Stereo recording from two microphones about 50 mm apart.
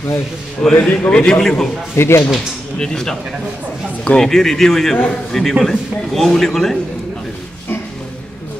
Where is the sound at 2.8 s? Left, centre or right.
Centre.